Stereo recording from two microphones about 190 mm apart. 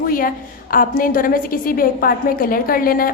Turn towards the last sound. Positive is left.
turn(degrees=50)  # may be behind; listen again after turning